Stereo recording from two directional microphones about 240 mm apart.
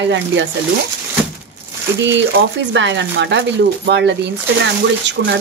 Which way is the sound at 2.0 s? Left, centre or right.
Right.